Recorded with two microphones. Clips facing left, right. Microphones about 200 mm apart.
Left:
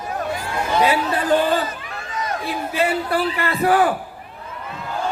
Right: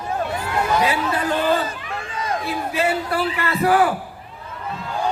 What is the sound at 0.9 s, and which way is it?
Speech, 30° left (ahead or behind).